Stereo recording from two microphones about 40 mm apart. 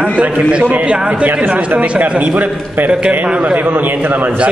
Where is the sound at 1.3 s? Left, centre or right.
Right.